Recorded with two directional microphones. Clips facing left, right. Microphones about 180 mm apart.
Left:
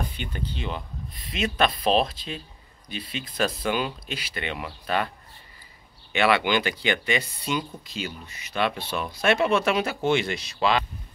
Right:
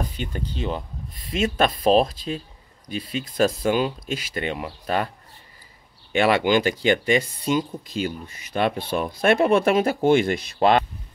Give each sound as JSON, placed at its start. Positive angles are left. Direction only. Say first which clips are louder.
{"t": 0.1, "sound": "speech", "louder": "right 3 dB", "side_deg": -40}
{"t": 6.1, "sound": "speech", "louder": "right 3 dB", "side_deg": -45}